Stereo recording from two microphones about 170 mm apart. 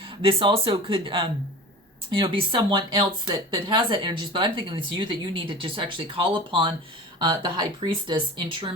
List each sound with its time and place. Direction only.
0.0 s a woman's voice: 30° right (ahead or behind)